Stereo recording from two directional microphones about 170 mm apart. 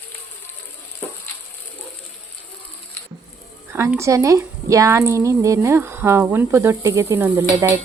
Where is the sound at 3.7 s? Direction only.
15° right (ahead or behind).